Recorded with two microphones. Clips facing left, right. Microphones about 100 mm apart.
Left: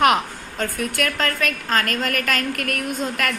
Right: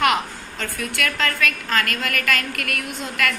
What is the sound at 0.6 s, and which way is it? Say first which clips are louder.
A woman's voice: left 3 dB; 35° left (ahead or behind).